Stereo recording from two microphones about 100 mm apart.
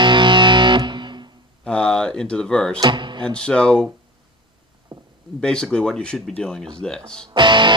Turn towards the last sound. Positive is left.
turn(degrees=-50)  # may be behind; listen again after turning